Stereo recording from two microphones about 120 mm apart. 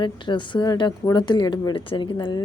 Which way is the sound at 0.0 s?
40° left (ahead or behind).